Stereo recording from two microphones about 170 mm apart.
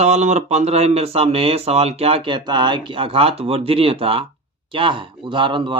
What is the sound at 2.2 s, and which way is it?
Speech, 25° right (ahead or behind).